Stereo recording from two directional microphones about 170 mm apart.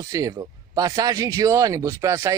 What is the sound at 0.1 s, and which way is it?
Speech, 20° right (ahead or behind).